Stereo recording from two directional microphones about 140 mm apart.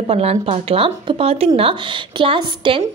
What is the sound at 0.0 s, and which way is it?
A woman's voice, 45° right (ahead or behind).